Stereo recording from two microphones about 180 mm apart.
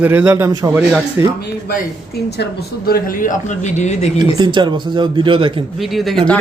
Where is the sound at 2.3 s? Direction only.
60° left (ahead or behind); by 4.1 s 40° left (ahead or behind).